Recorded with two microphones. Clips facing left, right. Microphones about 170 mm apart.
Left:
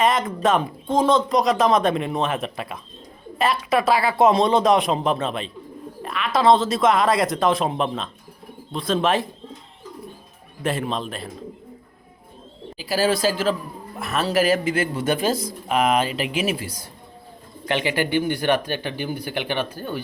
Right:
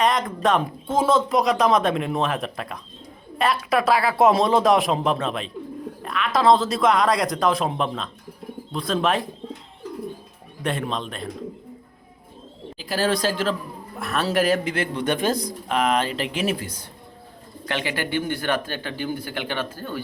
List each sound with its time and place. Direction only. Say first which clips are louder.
0.0 s speech: left 1 dB; centre (ahead or behind)
10.6 s speech: left 2 dB; 5° left (ahead or behind)
12.7 s speech: left 2 dB; 5° left (ahead or behind)